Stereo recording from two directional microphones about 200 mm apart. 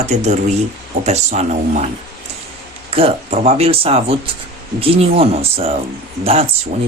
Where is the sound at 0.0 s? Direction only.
35° right (ahead or behind).